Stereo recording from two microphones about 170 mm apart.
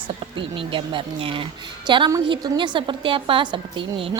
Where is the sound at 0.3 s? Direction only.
30° right (ahead or behind).